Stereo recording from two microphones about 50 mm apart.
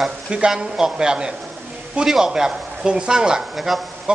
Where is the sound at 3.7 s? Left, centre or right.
Centre.